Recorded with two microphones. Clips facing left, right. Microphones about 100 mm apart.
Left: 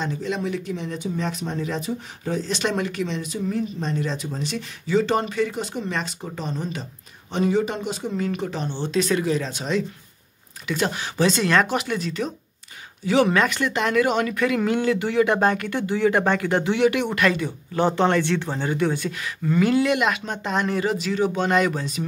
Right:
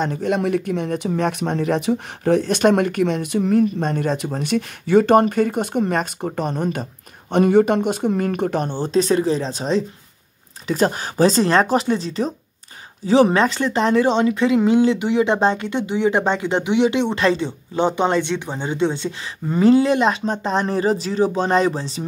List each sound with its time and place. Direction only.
0.0 s speech: 55° right (ahead or behind); by 22.0 s 30° right (ahead or behind)